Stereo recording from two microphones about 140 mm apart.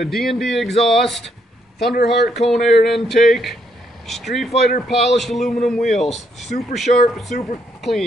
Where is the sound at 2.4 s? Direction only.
Centre (ahead or behind).